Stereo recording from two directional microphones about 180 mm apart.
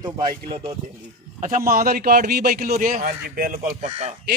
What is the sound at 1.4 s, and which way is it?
A man's voice, 50° right (ahead or behind).